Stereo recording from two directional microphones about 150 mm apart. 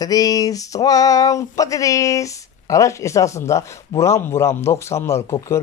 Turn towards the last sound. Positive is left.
turn(degrees=20)  # may be behind; listen again after turning